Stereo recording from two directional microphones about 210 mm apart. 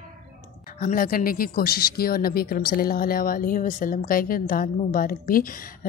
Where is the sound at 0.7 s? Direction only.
40° left (ahead or behind).